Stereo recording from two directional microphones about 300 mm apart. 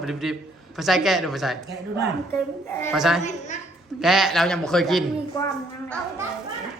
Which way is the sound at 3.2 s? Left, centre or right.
Left.